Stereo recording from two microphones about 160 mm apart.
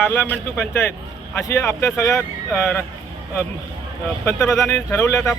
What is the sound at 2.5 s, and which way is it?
Speech, 5° left (ahead or behind).